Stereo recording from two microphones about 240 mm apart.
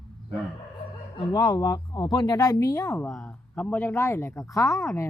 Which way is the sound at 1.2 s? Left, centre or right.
Centre.